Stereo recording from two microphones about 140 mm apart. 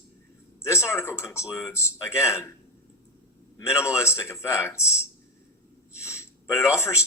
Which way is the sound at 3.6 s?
20° left (ahead or behind).